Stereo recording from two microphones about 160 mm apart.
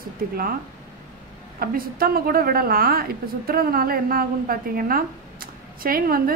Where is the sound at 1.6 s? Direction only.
65° right (ahead or behind).